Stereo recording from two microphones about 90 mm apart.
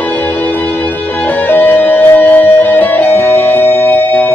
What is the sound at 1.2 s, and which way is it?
Music, 20° left (ahead or behind).